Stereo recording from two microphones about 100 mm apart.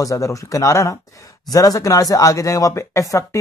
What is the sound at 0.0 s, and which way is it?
Speech, 35° left (ahead or behind).